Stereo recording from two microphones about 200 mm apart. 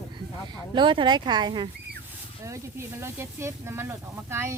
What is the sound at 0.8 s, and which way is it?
Speech, 25° right (ahead or behind).